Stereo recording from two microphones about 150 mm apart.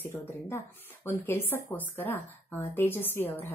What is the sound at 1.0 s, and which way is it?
A woman's voice, 15° left (ahead or behind).